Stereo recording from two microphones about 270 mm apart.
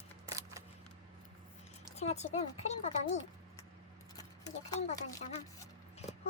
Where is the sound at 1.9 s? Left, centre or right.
Left.